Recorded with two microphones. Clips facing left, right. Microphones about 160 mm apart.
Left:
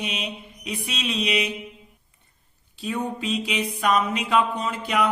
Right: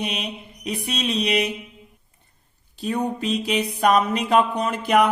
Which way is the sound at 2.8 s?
40° right (ahead or behind).